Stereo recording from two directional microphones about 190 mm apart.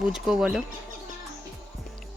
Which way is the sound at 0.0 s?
5° right (ahead or behind).